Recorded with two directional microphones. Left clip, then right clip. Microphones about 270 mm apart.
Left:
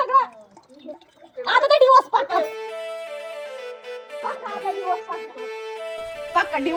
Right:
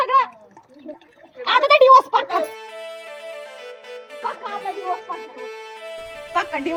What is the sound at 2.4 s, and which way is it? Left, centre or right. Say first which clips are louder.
Music: left 2 dB; centre.